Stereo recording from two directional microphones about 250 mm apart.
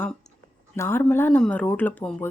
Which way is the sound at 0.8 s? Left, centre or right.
Centre.